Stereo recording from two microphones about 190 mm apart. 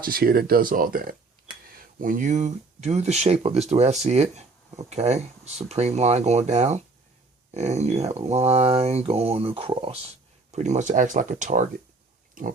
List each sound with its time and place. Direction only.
0.0 s speech: 50° right (ahead or behind)